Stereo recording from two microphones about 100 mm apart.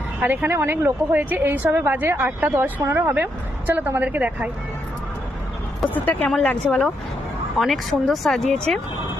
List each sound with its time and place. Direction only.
0.2 s a woman's voice: 20° right (ahead or behind)
5.8 s speech: 15° left (ahead or behind)